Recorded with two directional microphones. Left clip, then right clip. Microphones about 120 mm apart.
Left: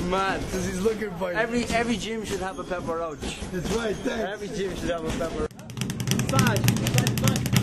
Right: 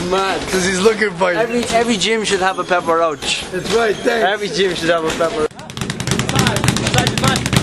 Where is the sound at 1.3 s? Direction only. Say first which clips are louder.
Right 9 dB; 55° right (ahead or behind).